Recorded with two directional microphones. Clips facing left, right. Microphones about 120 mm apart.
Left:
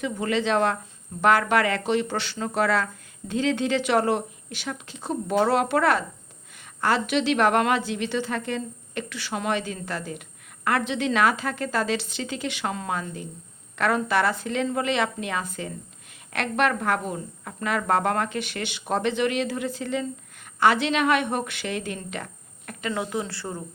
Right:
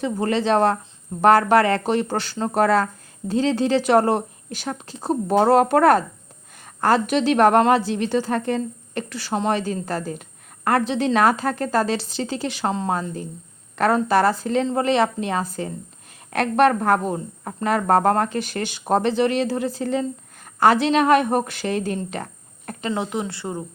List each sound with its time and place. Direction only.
0.0 s a woman's voice: 35° right (ahead or behind)
22.9 s a woman's voice: 20° right (ahead or behind)